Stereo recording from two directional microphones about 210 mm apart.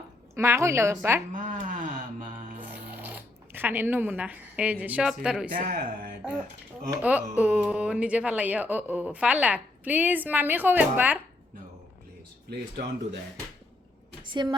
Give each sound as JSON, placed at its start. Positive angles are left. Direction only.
{"t": 0.3, "sound": "speech", "side_deg": -15}
{"t": 1.3, "sound": "a sound", "side_deg": -40}
{"t": 2.9, "sound": "speech", "side_deg": -10}
{"t": 5.5, "sound": "speech", "side_deg": -40}
{"t": 6.9, "sound": "speech", "side_deg": -10}
{"t": 12.5, "sound": "speech", "side_deg": -50}
{"t": 14.3, "sound": "a woman's voice", "side_deg": -20}